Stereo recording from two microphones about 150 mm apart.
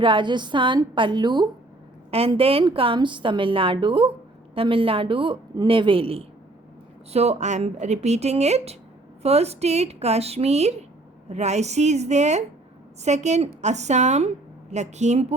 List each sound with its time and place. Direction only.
0.0 s a woman's voice: 35° right (ahead or behind)
2.0 s a woman's voice: 40° right (ahead or behind)